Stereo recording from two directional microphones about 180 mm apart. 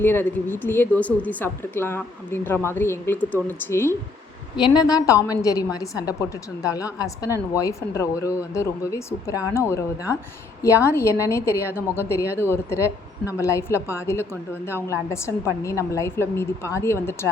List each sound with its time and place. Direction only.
0.0 s speech: 10° left (ahead or behind)
4.5 s a woman's voice: 25° left (ahead or behind)